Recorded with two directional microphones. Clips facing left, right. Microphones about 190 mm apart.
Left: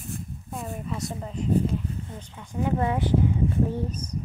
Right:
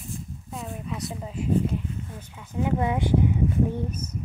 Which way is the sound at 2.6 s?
15° right (ahead or behind).